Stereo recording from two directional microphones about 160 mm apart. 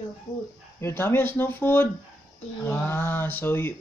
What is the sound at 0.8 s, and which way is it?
Speech, 15° left (ahead or behind).